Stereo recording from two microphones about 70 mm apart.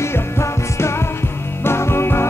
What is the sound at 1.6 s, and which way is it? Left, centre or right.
Music, left.